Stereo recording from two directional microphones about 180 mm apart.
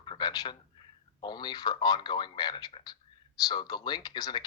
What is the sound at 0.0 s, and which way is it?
A man's voice, 25° left (ahead or behind).